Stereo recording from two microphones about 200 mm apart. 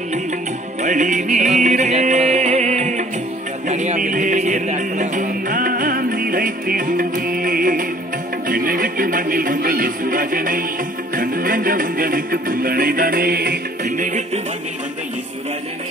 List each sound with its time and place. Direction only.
0.8 s music: 35° right (ahead or behind)